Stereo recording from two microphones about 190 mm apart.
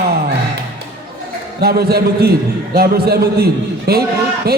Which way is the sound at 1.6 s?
55° right (ahead or behind).